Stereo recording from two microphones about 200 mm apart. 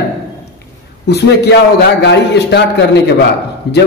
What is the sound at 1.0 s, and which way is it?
A man's voice, 55° left (ahead or behind).